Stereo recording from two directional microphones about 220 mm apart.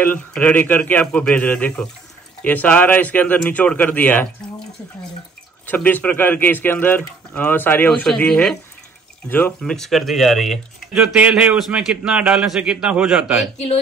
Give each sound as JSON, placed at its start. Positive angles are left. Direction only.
{"t": 0.0, "sound": "speech", "side_deg": 5}
{"t": 5.7, "sound": "speech", "side_deg": 10}